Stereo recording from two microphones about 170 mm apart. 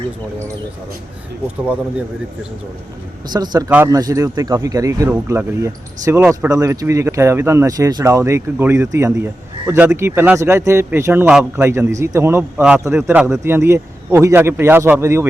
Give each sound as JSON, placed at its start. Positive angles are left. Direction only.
{"t": 3.3, "sound": "speech", "side_deg": -25}